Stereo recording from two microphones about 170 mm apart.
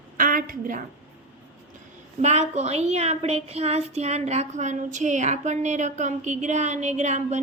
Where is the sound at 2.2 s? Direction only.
40° right (ahead or behind).